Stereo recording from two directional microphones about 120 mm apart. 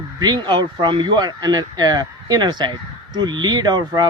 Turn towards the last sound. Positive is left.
turn(degrees=-35)  # may be behind; listen again after turning